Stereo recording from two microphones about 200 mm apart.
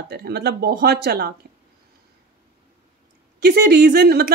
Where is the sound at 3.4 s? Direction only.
55° right (ahead or behind).